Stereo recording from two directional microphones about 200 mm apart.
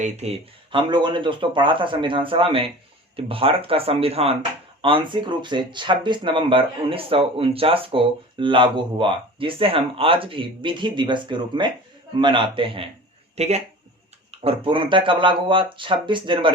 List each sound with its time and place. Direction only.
0.0 s speech: 30° right (ahead or behind)